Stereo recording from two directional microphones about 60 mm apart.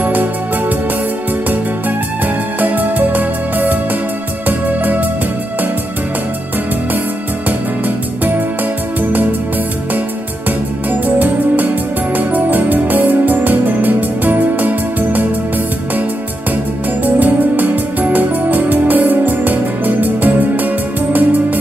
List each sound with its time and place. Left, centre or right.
0.0 s music: right
7.4 s music: right
10.9 s music: right
17.0 s music: right